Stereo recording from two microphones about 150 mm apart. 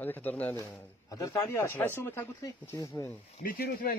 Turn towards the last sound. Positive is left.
turn(degrees=80)